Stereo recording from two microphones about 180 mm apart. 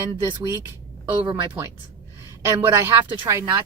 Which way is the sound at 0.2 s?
20° right (ahead or behind).